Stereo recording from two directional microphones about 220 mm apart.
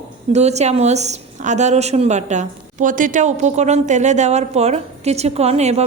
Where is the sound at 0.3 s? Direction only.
30° right (ahead or behind).